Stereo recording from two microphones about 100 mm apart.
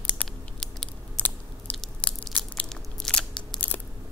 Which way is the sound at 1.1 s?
20° left (ahead or behind).